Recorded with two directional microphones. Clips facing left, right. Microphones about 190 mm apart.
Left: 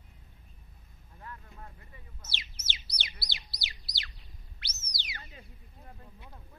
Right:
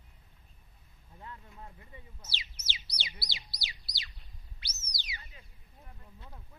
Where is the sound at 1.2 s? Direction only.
20° right (ahead or behind).